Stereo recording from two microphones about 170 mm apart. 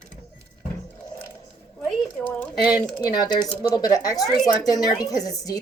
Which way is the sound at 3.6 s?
20° left (ahead or behind).